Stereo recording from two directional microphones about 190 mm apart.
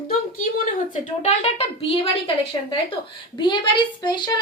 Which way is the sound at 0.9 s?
35° left (ahead or behind).